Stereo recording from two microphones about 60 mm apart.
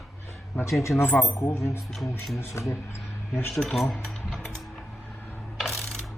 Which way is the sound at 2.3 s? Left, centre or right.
Left.